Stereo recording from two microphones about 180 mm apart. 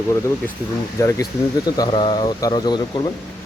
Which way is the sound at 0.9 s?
20° left (ahead or behind).